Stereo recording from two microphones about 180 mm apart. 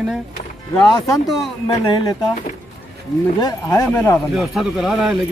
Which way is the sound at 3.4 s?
20° left (ahead or behind).